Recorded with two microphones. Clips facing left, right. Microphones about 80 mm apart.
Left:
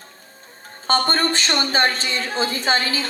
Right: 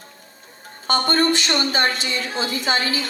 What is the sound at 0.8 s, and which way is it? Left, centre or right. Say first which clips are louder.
A man's voice: right 1 dB; left.